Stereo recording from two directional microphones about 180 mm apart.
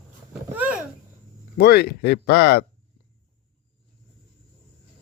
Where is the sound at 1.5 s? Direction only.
65° left (ahead or behind).